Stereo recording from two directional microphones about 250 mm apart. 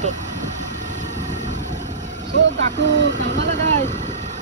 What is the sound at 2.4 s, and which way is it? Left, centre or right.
Speech, right.